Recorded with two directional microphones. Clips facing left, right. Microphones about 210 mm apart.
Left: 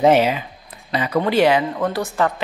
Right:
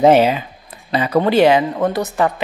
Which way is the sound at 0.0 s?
35° right (ahead or behind).